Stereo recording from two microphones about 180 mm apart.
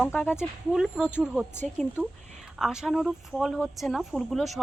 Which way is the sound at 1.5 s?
10° left (ahead or behind).